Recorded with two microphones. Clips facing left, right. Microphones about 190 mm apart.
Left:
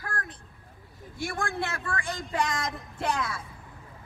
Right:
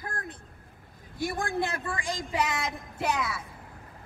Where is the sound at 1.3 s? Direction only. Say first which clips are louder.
Right 1 dB; 20° right (ahead or behind).